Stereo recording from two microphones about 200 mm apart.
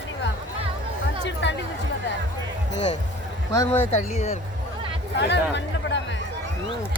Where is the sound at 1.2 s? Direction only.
60° left (ahead or behind).